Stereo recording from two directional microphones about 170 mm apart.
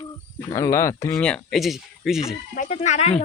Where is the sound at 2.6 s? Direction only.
45° left (ahead or behind).